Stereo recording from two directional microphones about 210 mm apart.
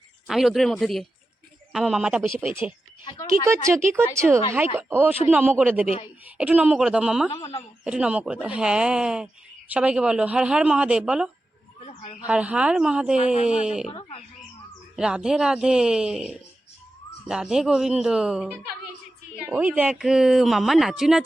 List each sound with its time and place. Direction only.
0.3 s speech: centre (ahead or behind)
3.0 s speech: 20° left (ahead or behind)
3.4 s speech: 10° right (ahead or behind)
11.8 s a sound: 30° left (ahead or behind)
12.2 s speech: 5° right (ahead or behind)
13.8 s speech: 30° left (ahead or behind)
14.9 s speech: 5° right (ahead or behind)